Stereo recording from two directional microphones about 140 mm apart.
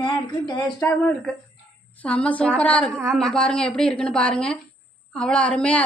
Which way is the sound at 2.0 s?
10° left (ahead or behind).